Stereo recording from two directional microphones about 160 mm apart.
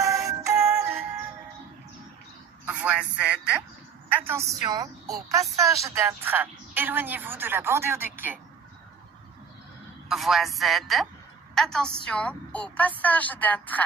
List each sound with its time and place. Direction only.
0.0 s music: 20° right (ahead or behind)
2.6 s a man's voice: 10° right (ahead or behind)
10.1 s a woman's voice: centre (ahead or behind)